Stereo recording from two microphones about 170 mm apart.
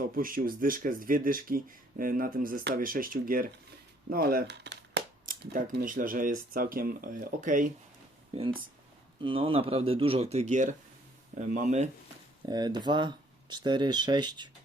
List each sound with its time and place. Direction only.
0.0 s speech: 55° right (ahead or behind); by 5.0 s 85° right
5.2 s cap gun: 55° right (ahead or behind)
5.8 s speech: 55° right (ahead or behind)
9.2 s speech: 30° right (ahead or behind)
12.5 s speech: 25° right (ahead or behind)